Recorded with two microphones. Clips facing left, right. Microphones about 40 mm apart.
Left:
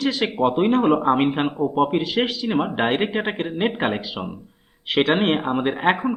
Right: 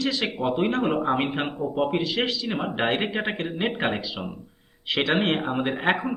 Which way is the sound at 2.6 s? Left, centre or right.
Centre.